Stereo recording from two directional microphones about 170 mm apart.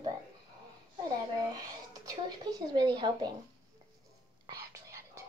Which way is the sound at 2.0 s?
25° right (ahead or behind).